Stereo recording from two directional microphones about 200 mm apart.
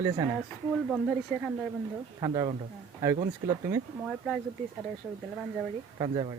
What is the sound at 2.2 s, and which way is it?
Speech, 20° right (ahead or behind).